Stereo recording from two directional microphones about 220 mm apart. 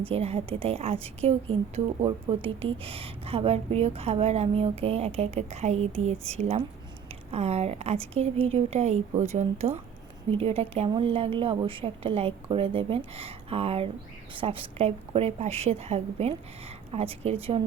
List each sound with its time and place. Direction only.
0.1 s a woman's voice: 25° right (ahead or behind)